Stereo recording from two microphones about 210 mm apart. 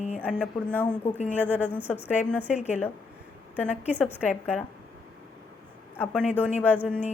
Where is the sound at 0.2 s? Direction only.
5° left (ahead or behind).